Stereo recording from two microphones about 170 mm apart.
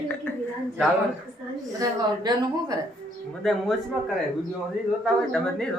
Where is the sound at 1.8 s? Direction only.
20° right (ahead or behind).